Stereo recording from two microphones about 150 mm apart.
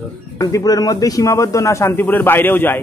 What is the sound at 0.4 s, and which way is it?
A man's voice, 20° left (ahead or behind).